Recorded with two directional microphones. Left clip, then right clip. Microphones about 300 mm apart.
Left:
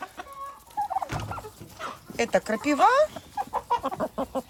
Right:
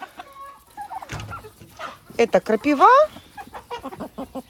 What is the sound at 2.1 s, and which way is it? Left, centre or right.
Speech, centre.